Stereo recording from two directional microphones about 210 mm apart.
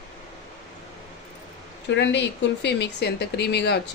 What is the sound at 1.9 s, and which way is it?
A woman's voice, 55° left (ahead or behind).